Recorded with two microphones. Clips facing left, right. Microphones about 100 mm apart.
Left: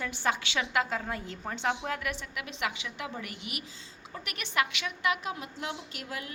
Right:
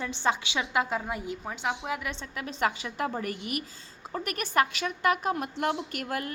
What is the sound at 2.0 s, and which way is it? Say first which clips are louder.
A woman's voice: even; 25° right (ahead or behind).